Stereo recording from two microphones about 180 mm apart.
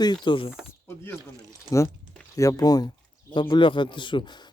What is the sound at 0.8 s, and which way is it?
Speech, 15° left (ahead or behind).